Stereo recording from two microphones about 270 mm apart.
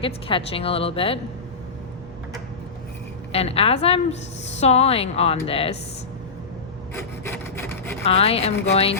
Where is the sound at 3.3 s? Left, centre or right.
Left.